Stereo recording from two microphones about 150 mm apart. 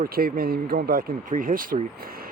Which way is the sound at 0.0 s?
80° right.